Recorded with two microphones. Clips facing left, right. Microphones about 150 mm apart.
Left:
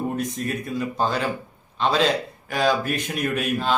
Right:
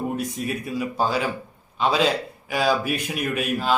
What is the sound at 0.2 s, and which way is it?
A man's voice, 5° right (ahead or behind).